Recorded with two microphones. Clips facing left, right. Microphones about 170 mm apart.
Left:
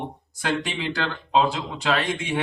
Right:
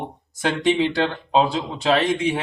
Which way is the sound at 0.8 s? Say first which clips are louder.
Right 7 dB; 30° right (ahead or behind).